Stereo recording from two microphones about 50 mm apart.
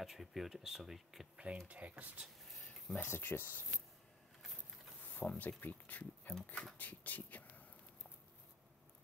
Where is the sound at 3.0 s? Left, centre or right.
Left.